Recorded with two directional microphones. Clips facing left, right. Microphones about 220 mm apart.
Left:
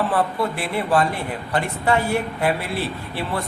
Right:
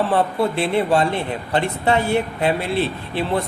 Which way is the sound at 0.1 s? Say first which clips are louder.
Right 3 dB; 25° right (ahead or behind).